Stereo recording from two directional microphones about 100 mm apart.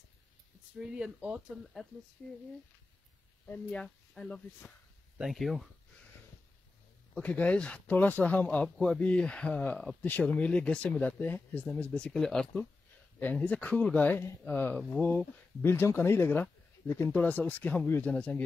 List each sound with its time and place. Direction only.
0.7 s speech: 10° right (ahead or behind)
3.4 s speech: 20° left (ahead or behind)
3.8 s speech: 5° left (ahead or behind)
5.2 s speech: centre (ahead or behind)
7.2 s speech: 15° left (ahead or behind)
8.6 s speech: 5° left (ahead or behind)